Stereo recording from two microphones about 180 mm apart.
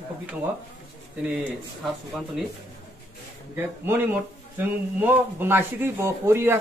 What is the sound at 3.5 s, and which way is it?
Speech, 10° right (ahead or behind).